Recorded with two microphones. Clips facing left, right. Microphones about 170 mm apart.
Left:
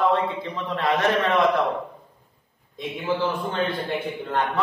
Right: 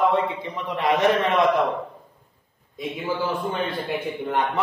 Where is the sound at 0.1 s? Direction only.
15° right (ahead or behind).